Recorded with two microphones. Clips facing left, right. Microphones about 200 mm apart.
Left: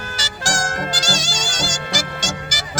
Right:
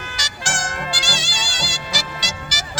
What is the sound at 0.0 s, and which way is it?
Music, 40° left (ahead or behind).